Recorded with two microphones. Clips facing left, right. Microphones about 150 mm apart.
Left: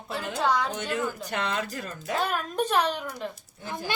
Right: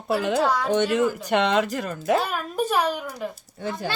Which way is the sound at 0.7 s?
85° right.